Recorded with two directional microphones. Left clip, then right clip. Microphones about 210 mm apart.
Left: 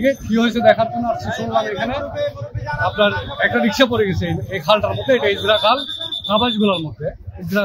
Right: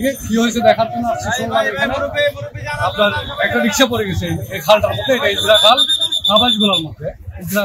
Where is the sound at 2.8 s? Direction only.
30° left (ahead or behind).